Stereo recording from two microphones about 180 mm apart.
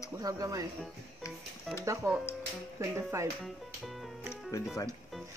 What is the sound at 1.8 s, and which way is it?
Speech, 15° right (ahead or behind).